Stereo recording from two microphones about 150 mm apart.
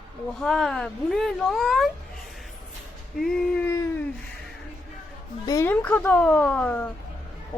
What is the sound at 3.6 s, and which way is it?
Speech, 20° left (ahead or behind).